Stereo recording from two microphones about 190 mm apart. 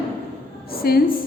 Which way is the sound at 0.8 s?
50° left (ahead or behind).